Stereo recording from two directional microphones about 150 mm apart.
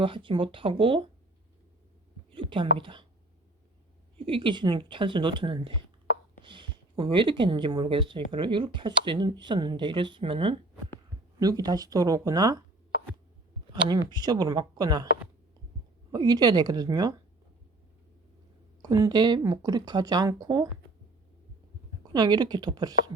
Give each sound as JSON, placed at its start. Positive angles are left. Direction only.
{"t": 0.0, "sound": "speech", "side_deg": -35}
{"t": 2.3, "sound": "speech", "side_deg": -35}
{"t": 4.3, "sound": "speech", "side_deg": -35}
{"t": 11.3, "sound": "speech", "side_deg": -25}
{"t": 14.1, "sound": "speech", "side_deg": -25}
{"t": 16.1, "sound": "speech", "side_deg": -25}
{"t": 18.8, "sound": "speech", "side_deg": -25}
{"t": 22.0, "sound": "speech", "side_deg": -25}